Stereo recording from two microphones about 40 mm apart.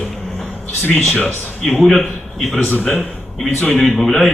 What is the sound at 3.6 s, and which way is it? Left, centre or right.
Speech, left.